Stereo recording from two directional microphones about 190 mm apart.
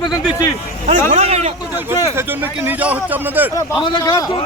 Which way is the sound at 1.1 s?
35° right (ahead or behind).